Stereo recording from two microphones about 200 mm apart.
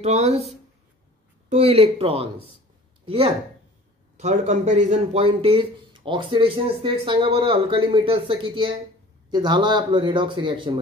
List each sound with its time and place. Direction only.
0.0 s speech: 30° right (ahead or behind)
1.5 s speech: 30° right (ahead or behind)